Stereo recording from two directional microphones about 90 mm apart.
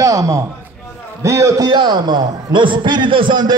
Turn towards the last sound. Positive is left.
turn(degrees=-60)  # may be behind; listen again after turning